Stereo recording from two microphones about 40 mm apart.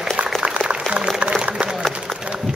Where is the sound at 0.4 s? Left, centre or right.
Right.